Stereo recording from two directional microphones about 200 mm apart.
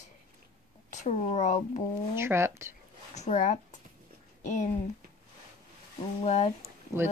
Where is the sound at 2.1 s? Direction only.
10° right (ahead or behind).